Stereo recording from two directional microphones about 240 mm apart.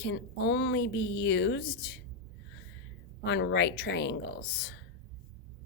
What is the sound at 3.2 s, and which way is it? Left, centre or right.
Speech, left.